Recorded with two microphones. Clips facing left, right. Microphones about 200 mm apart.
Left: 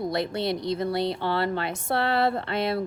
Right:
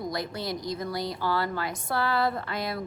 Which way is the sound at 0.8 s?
30° left (ahead or behind).